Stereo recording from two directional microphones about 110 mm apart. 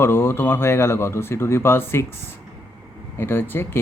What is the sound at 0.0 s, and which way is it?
Speech, 20° left (ahead or behind).